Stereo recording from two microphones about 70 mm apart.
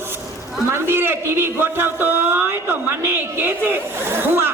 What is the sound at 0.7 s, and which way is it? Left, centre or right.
A man's voice, right.